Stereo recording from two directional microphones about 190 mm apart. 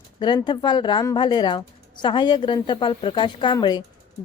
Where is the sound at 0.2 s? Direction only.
20° left (ahead or behind).